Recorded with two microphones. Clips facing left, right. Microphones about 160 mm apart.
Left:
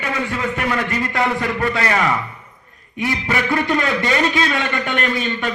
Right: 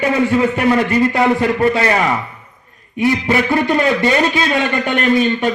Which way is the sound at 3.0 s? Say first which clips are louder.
Right 6 dB; 25° right (ahead or behind).